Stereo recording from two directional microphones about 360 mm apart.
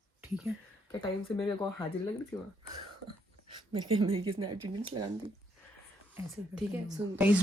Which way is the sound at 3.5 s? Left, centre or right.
Centre.